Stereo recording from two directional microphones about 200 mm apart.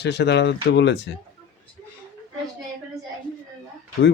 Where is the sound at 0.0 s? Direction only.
60° left (ahead or behind).